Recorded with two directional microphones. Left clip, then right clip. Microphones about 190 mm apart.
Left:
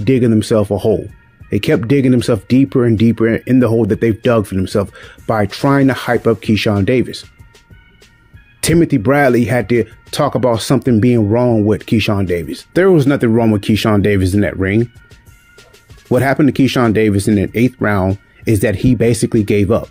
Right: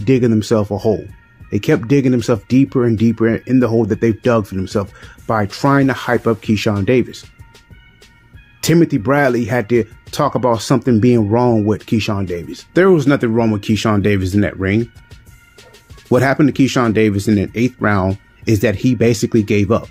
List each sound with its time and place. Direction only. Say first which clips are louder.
0.0 s speech: left 1 dB; 30° left (ahead or behind)
8.5 s speech: left 1 dB; 30° left (ahead or behind)
16.1 s speech: even; 35° left (ahead or behind)